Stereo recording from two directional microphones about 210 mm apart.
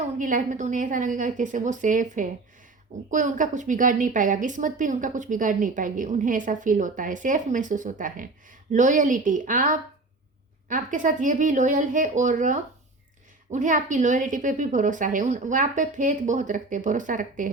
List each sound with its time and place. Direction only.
0.2 s a woman's voice: 40° right (ahead or behind)